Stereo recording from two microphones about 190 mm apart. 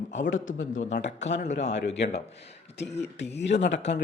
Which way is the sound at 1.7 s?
65° left (ahead or behind).